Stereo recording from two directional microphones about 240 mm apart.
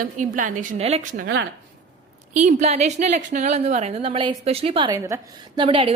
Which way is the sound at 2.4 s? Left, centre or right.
Right.